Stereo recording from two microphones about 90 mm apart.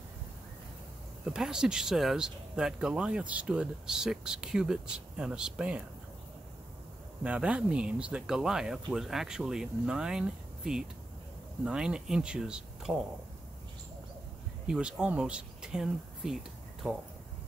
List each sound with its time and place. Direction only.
1.2 s speech: 5° right (ahead or behind)
7.2 s speech: 15° right (ahead or behind)
14.7 s speech: 10° right (ahead or behind)